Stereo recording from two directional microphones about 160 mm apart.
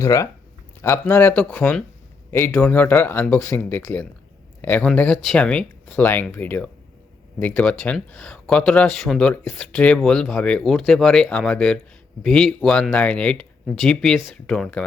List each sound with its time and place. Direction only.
0.0 s speech: 20° left (ahead or behind)